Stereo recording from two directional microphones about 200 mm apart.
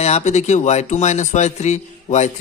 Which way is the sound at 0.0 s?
35° left (ahead or behind).